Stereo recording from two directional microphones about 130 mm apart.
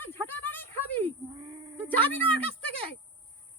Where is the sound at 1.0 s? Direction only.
35° right (ahead or behind).